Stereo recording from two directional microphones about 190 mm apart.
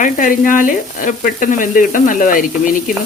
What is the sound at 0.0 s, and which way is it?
Speech, 45° left (ahead or behind).